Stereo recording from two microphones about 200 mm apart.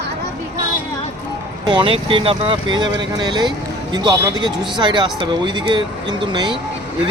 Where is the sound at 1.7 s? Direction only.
25° right (ahead or behind).